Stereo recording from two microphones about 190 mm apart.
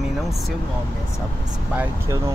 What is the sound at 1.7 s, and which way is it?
Speech, 15° right (ahead or behind).